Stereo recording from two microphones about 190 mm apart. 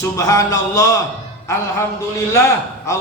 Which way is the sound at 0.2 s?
15° left (ahead or behind).